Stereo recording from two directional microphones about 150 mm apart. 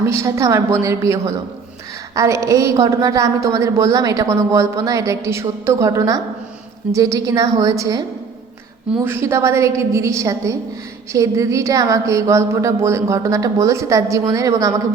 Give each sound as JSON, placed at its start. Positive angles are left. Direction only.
{"t": 0.1, "sound": "speech", "side_deg": -20}
{"t": 9.0, "sound": "speech", "side_deg": -15}